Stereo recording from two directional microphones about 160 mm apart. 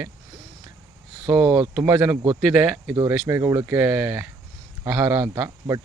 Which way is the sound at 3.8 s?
5° right (ahead or behind).